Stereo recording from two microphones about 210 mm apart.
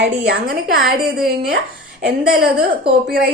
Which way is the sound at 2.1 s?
45° right (ahead or behind).